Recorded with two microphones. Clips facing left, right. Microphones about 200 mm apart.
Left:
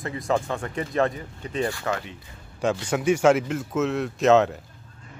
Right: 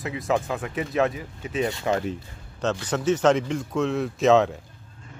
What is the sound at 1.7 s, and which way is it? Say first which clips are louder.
Speech: right 3 dB; 20° right (ahead or behind).